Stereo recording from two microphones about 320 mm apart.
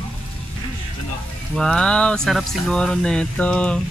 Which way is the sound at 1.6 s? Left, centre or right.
Centre.